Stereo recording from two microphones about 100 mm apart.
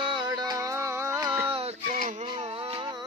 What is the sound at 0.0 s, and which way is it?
Music, 55° right (ahead or behind).